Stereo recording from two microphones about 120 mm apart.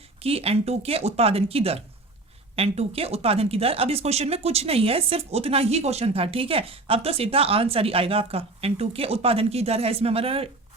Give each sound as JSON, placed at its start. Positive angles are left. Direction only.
{"t": 0.2, "sound": "speech", "side_deg": -55}